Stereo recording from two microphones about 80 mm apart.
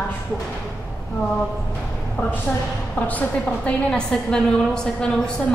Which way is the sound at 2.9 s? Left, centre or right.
Centre.